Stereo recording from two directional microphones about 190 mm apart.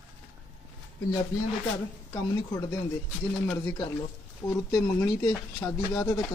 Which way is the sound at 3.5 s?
15° left (ahead or behind).